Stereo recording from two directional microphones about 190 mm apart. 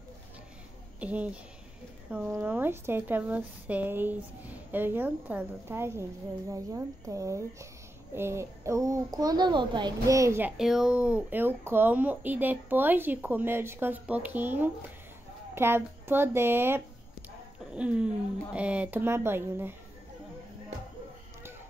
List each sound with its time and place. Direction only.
0.9 s speech: 5° right (ahead or behind)
10.6 s speech: centre (ahead or behind)